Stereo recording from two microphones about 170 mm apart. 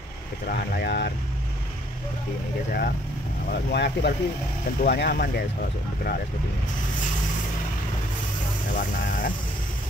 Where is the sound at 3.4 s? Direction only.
80° left; by 6.1 s 60° left (ahead or behind).